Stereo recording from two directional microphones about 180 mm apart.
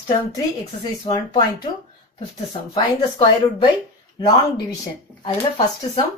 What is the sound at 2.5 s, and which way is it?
Speech, 30° left (ahead or behind).